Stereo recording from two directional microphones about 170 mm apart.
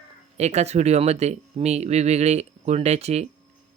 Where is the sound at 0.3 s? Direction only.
40° right (ahead or behind).